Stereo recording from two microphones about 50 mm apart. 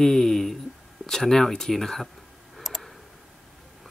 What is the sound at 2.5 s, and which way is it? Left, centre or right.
Tick, centre.